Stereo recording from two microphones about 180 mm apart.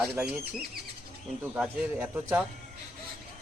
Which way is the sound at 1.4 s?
10° right (ahead or behind).